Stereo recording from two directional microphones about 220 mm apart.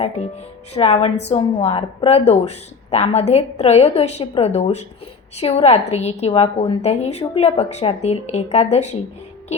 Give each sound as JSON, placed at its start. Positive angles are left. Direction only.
{"t": 0.7, "sound": "a woman's voice", "side_deg": 25}